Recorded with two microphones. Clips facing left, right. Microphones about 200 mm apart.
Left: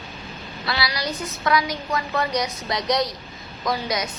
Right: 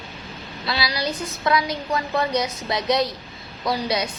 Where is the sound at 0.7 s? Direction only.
25° right (ahead or behind).